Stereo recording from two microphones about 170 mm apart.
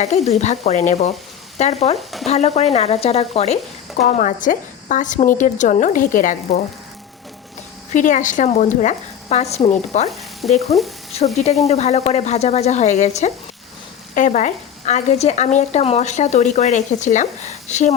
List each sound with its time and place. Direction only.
0.3 s speech: 40° left (ahead or behind)
2.0 s stir: centre (ahead or behind)
2.2 s speech: 40° left (ahead or behind)
7.9 s speech: 50° left (ahead or behind)